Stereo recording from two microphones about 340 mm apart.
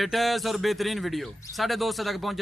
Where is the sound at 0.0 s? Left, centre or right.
Centre.